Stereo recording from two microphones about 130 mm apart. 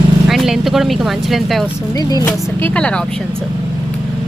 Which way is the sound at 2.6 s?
10° left (ahead or behind).